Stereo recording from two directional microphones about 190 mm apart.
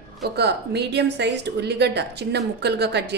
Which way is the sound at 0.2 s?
60° right (ahead or behind).